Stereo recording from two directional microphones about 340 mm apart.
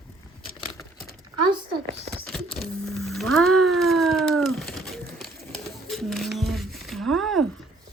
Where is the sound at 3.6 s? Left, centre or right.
Centre.